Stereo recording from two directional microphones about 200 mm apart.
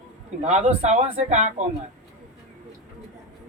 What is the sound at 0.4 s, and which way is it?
Speech, 35° right (ahead or behind).